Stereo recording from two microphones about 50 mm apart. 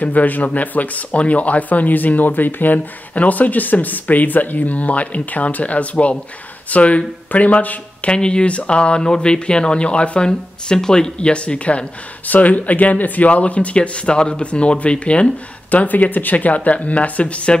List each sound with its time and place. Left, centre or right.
0.0 s speech: left
8.1 s speech: centre